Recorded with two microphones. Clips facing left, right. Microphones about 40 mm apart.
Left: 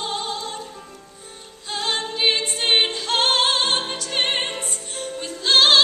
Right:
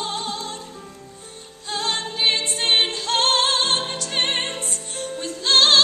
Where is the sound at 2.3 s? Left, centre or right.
Right.